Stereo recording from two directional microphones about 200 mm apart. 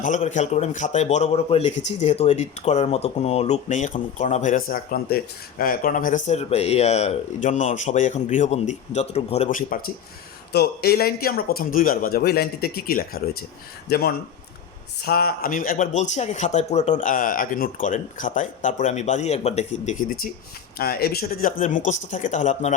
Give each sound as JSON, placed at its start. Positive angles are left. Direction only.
{"t": 0.0, "sound": "speech", "side_deg": 40}